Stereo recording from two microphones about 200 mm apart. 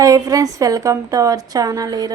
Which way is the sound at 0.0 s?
15° right (ahead or behind).